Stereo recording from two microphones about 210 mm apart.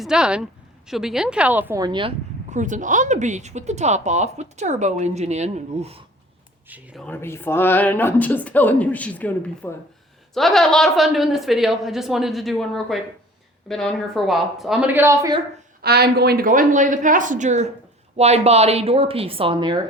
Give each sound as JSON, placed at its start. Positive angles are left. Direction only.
{"t": 0.0, "sound": "a woman's voice", "side_deg": -5}
{"t": 2.5, "sound": "speech", "side_deg": -35}
{"t": 6.7, "sound": "a woman's voice", "side_deg": -5}
{"t": 7.0, "sound": "a woman's voice", "side_deg": 10}
{"t": 15.8, "sound": "speech", "side_deg": -50}